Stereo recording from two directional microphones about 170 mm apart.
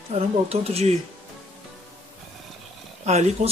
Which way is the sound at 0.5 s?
35° right (ahead or behind).